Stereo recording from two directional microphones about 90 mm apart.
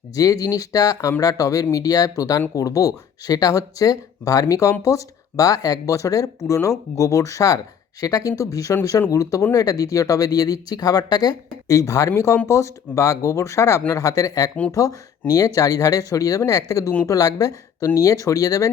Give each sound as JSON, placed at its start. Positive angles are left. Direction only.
{"t": 0.2, "sound": "speech", "side_deg": 40}